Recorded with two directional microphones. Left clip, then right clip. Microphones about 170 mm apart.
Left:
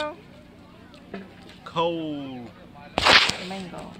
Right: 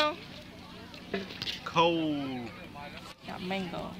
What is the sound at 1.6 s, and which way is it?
Speech, 15° left (ahead or behind).